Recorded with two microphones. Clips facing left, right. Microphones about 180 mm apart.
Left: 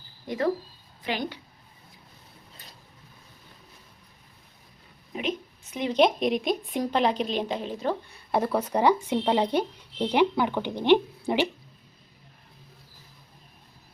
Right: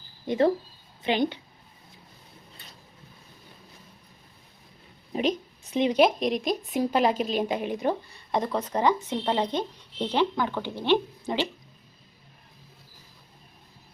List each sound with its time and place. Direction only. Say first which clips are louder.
0.3 s speech: right 4 dB; 25° right (ahead or behind)
5.1 s a sound: right 4 dB; 35° right (ahead or behind)
5.9 s speech: left 2 dB; 5° right (ahead or behind)
8.1 s speech: left 2 dB; 5° left (ahead or behind)